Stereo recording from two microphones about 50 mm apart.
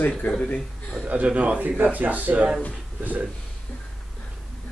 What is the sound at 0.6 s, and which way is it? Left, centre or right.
Speech, centre.